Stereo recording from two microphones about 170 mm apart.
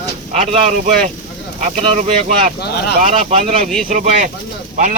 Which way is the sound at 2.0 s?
45° right (ahead or behind).